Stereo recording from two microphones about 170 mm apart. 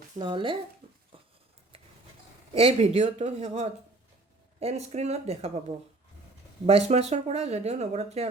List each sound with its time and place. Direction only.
0.2 s speech: 30° right (ahead or behind)
2.5 s speech: 35° right (ahead or behind)